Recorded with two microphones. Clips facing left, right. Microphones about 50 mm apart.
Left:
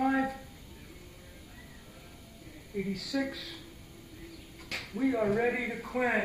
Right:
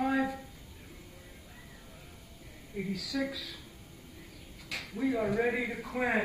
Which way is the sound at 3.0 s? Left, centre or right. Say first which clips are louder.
Left 1 dB; left.